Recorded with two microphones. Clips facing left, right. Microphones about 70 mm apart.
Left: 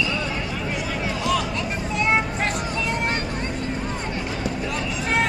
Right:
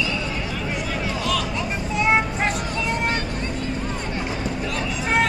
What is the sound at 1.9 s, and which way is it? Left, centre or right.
Music, centre.